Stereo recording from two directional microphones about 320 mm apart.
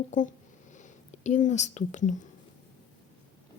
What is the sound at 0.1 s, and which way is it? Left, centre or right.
Speech, left.